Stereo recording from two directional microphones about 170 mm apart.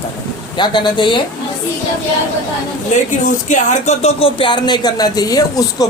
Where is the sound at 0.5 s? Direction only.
25° left (ahead or behind).